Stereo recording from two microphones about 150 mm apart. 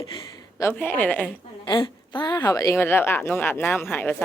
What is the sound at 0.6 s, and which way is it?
Speech, 15° left (ahead or behind).